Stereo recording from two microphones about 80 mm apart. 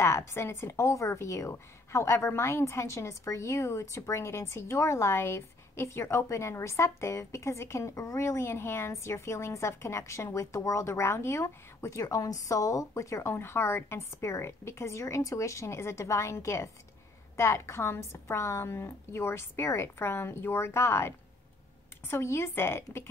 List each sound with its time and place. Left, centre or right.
0.0 s a woman's voice: left